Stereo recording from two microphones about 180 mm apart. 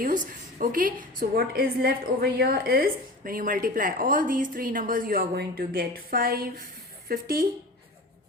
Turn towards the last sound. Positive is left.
turn(degrees=-55)  # may be behind; listen again after turning